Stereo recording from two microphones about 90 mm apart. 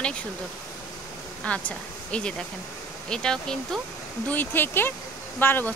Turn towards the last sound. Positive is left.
turn(degrees=25)  # may be behind; listen again after turning